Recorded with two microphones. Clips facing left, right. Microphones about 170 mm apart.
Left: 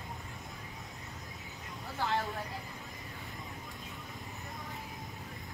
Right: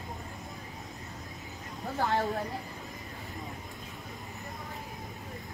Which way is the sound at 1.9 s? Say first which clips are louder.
Right 4 dB; 45° right (ahead or behind).